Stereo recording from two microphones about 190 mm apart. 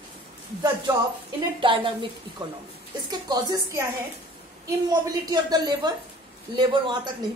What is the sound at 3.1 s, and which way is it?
A woman's voice, 20° right (ahead or behind).